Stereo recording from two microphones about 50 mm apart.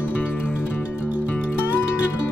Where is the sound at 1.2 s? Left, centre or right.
Left.